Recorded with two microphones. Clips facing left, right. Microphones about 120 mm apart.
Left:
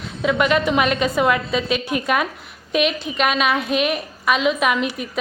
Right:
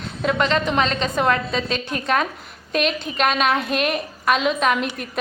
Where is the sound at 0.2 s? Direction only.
5° left (ahead or behind).